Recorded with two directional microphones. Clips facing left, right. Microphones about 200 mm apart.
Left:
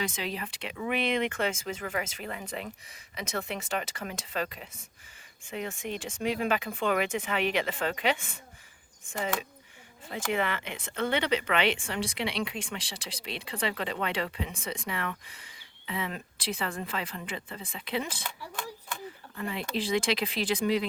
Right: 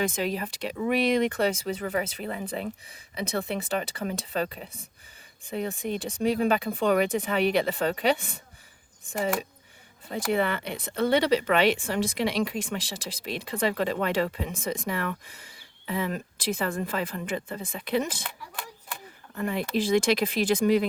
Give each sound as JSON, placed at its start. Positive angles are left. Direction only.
{"t": 0.0, "sound": "speech", "side_deg": -45}
{"t": 19.4, "sound": "speech", "side_deg": -45}